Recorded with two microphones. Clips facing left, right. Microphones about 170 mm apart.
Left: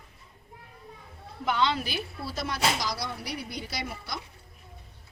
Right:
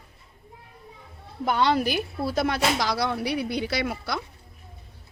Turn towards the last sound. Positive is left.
turn(degrees=-75)  # may be behind; listen again after turning